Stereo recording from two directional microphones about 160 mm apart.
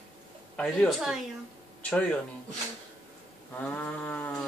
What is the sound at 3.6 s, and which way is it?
Speech, 10° left (ahead or behind).